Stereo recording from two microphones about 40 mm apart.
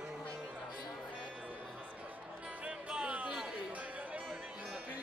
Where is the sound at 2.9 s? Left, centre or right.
Right.